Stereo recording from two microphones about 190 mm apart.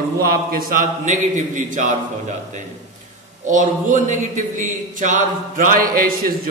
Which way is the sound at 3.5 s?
40° right (ahead or behind).